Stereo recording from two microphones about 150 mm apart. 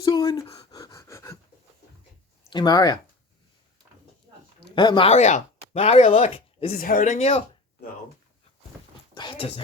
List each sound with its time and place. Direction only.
0.0 s gasp: 25° left (ahead or behind)
0.7 s pant: 25° left (ahead or behind)
2.5 s speech: 30° left (ahead or behind)
4.6 s speech: 30° left (ahead or behind)
5.1 s speech: 50° left (ahead or behind)
6.7 s speech: 60° left (ahead or behind)
9.1 s speech: 35° left (ahead or behind)